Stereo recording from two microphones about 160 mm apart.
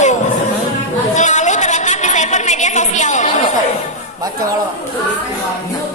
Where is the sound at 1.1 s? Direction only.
50° left (ahead or behind).